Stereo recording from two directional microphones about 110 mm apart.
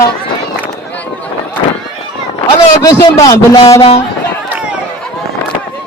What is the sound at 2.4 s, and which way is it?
A man's voice, 30° left (ahead or behind).